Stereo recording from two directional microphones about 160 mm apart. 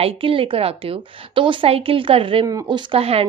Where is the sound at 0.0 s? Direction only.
35° right (ahead or behind).